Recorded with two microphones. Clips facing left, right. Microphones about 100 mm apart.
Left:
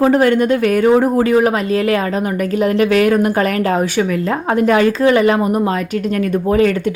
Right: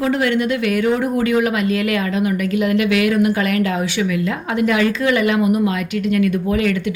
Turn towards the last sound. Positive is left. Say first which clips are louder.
# left 5 dB
turn(degrees=40)  # may be behind; listen again after turning